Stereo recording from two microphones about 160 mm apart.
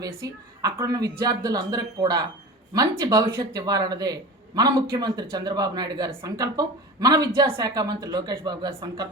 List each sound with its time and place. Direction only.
0.0 s a man's voice: 20° right (ahead or behind)